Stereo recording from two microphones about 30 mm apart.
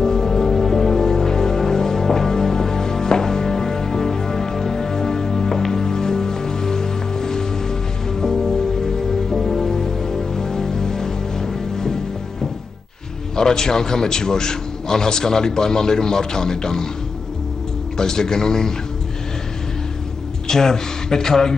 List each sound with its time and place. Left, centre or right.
0.0 s music: centre
13.4 s a man's voice: centre
17.9 s a man's voice: left
20.4 s a man's voice: centre